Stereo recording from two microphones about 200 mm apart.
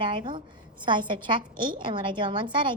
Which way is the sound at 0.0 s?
25° right (ahead or behind).